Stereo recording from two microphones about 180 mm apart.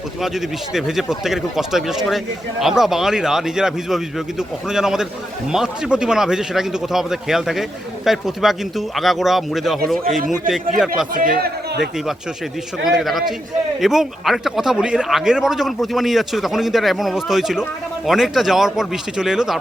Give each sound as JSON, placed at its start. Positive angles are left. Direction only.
{"t": 0.2, "sound": "speech", "side_deg": 0}
{"t": 11.1, "sound": "a man's voice", "side_deg": -50}
{"t": 12.8, "sound": "speech", "side_deg": 0}